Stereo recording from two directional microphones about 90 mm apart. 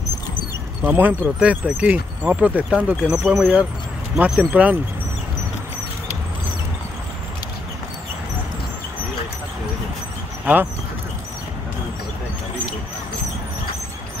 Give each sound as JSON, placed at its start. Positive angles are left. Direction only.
{"t": 0.8, "sound": "speech", "side_deg": -20}
{"t": 10.4, "sound": "speech", "side_deg": -20}